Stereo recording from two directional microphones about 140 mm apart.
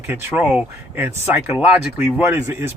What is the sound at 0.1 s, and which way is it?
Speech, 15° right (ahead or behind).